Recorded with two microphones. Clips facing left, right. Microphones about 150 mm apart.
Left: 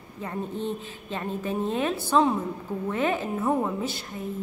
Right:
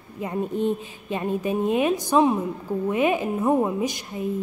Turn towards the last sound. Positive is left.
turn(degrees=-15)  # may be behind; listen again after turning